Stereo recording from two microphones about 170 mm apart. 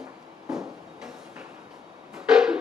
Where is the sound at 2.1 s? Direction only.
5° right (ahead or behind).